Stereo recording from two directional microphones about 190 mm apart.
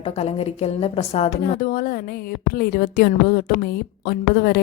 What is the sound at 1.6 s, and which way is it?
A woman's voice, 50° left (ahead or behind).